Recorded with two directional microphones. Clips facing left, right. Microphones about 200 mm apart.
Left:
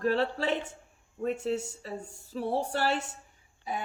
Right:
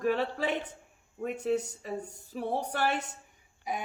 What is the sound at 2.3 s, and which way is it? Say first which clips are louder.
Speech: left 3 dB; 15° right (ahead or behind).